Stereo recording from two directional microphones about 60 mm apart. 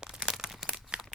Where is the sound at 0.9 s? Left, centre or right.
Centre.